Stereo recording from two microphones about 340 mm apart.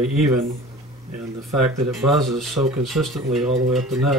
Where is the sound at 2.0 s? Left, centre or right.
Centre.